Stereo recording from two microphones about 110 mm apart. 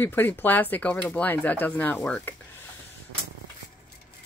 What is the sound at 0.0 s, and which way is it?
Speech, 20° left (ahead or behind).